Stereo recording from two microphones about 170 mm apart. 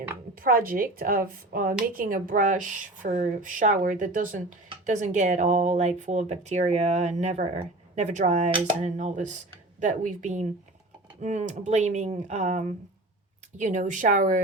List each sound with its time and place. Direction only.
0.3 s a woman's voice: 55° right (ahead or behind)